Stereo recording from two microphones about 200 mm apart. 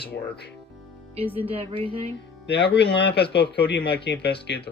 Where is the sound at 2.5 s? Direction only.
60° left (ahead or behind).